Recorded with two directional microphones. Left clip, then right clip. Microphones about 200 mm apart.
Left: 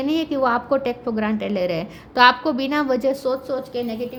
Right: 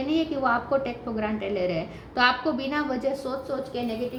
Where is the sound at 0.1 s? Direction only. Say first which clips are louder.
Left 4 dB; 60° left (ahead or behind).